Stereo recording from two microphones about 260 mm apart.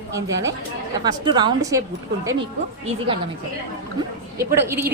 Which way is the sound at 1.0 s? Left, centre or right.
Centre.